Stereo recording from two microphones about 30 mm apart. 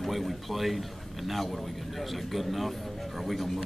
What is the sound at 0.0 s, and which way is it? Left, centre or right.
A man's voice, centre.